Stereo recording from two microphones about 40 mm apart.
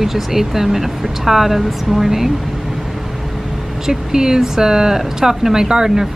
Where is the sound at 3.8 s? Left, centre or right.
Centre.